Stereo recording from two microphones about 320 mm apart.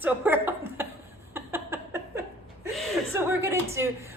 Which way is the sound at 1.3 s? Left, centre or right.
Centre.